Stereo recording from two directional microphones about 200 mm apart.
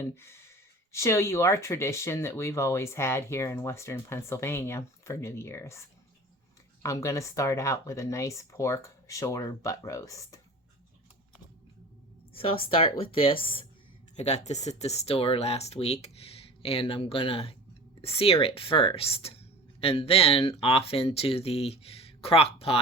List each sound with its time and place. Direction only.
0.0 s speech: 10° left (ahead or behind)
6.8 s speech: 15° left (ahead or behind)
12.4 s speech: 25° left (ahead or behind)